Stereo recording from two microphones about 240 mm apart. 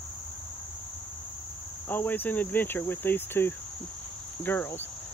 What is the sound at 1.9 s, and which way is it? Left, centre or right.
Cricket, centre.